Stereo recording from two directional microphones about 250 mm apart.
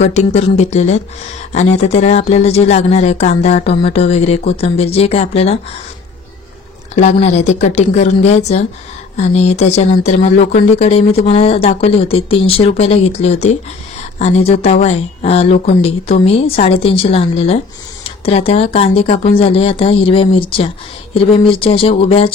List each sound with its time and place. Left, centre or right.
0.0 s speech: left
7.0 s speech: left